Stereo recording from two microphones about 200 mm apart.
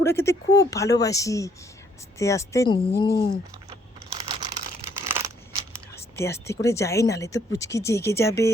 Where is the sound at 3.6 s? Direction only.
20° right (ahead or behind).